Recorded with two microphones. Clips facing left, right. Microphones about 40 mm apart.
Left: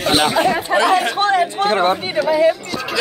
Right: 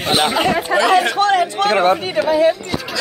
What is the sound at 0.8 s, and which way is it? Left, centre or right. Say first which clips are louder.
Speech: right 3 dB; right.